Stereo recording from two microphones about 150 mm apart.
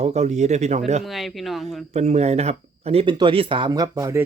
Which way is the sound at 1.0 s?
Centre (ahead or behind).